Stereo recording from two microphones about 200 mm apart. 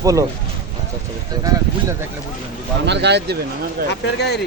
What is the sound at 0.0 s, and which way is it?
Speech, 15° right (ahead or behind).